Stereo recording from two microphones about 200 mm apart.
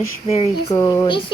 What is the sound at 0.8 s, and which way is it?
Speech, 15° left (ahead or behind).